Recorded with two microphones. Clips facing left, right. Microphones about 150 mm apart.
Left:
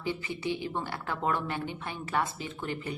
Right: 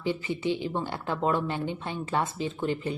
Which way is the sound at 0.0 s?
20° right (ahead or behind).